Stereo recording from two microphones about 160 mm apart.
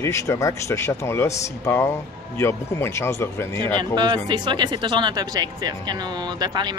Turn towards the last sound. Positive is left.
turn(degrees=-25)  # may be behind; listen again after turning